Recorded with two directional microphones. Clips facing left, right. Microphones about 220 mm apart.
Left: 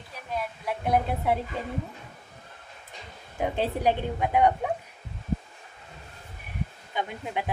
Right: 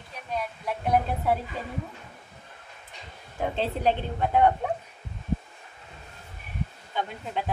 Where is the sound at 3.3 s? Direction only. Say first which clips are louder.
Left 1 dB; 15° left (ahead or behind).